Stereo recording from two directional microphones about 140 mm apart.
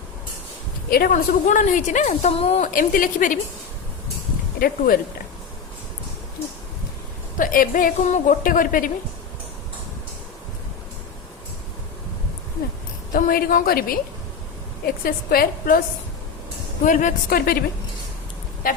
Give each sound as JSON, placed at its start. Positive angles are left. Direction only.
{"t": 0.9, "sound": "a woman's voice", "side_deg": 90}
{"t": 2.7, "sound": "a woman's voice", "side_deg": 80}
{"t": 4.6, "sound": "a woman's voice", "side_deg": 90}
{"t": 7.3, "sound": "a woman's voice", "side_deg": 80}
{"t": 13.1, "sound": "a woman's voice", "side_deg": 90}
{"t": 16.8, "sound": "a woman's voice", "side_deg": 65}
{"t": 18.6, "sound": "vehicle", "side_deg": 85}